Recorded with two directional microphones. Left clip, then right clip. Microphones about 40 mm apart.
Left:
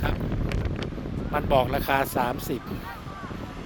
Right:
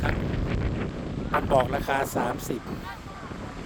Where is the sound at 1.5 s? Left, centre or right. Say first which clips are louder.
Left 2 dB; right.